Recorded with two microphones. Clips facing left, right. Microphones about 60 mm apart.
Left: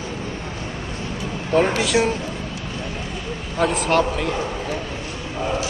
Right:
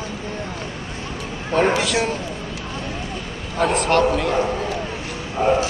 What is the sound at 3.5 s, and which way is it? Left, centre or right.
Speech, centre.